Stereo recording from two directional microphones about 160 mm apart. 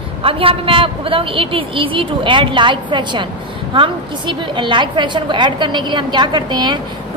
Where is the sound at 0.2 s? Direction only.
35° right (ahead or behind).